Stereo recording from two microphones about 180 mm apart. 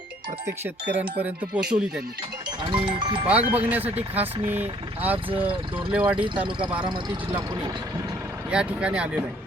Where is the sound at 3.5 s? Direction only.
10° right (ahead or behind).